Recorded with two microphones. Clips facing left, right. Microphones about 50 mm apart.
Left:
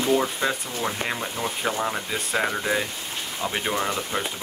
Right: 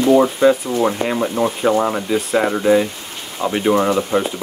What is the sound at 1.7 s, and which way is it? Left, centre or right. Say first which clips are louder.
Speech: right 13 dB; right.